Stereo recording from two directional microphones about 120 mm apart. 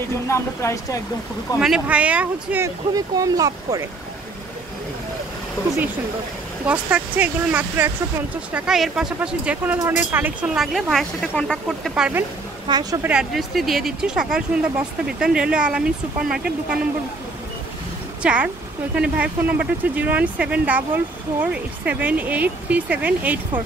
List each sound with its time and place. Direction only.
0.3 s speech: 25° left (ahead or behind)
1.6 s speech: 5° right (ahead or behind)
2.9 s speech: 30° right (ahead or behind)
6.6 s speech: 10° right (ahead or behind)
8.5 s speech: 5° right (ahead or behind)
10.5 s speech: centre (ahead or behind)
11.9 s speech: 15° right (ahead or behind)
12.6 s speech: 35° right (ahead or behind)
13.0 s speech: 5° right (ahead or behind)
18.2 s speech: 10° right (ahead or behind)